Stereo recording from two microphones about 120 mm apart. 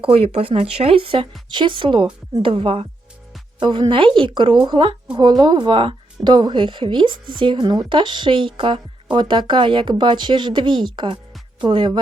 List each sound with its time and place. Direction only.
0.0 s a woman's voice: 50° right (ahead or behind)